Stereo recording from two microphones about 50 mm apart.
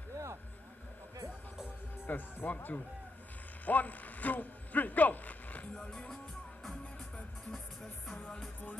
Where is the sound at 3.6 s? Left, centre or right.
Left.